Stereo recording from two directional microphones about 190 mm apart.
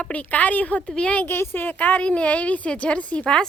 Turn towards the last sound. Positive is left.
turn(degrees=5)  # may be behind; listen again after turning